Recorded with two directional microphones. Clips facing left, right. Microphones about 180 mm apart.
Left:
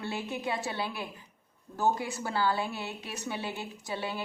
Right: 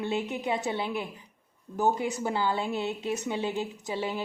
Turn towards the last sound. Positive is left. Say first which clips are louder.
# right 4 dB
turn(degrees=-20)  # may be behind; listen again after turning